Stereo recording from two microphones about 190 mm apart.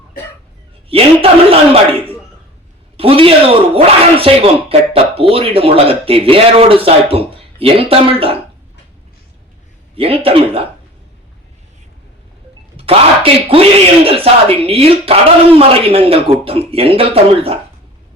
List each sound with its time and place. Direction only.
0.9 s speech: 30° right (ahead or behind)
3.0 s speech: 30° right (ahead or behind)
9.9 s speech: 30° right (ahead or behind)
12.7 s speech: 30° right (ahead or behind)